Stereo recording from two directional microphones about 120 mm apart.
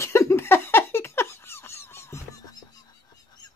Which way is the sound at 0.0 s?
20° left (ahead or behind).